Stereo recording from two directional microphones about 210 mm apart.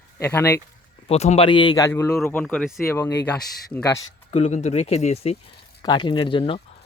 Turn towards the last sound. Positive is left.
turn(degrees=25)  # may be behind; listen again after turning